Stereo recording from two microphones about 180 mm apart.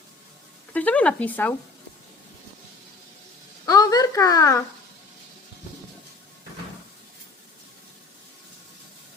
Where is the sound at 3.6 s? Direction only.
20° left (ahead or behind).